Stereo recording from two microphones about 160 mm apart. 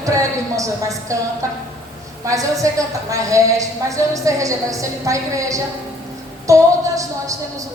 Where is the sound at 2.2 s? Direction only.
20° right (ahead or behind).